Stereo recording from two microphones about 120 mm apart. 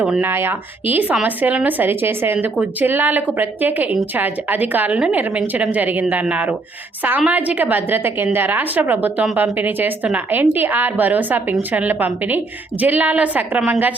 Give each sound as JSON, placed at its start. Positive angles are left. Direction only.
{"t": 0.0, "sound": "a woman's voice", "side_deg": -15}